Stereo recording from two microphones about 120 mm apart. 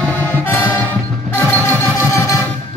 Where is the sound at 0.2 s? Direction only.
15° left (ahead or behind).